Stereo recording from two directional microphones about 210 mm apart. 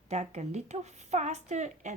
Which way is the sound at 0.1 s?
35° right (ahead or behind).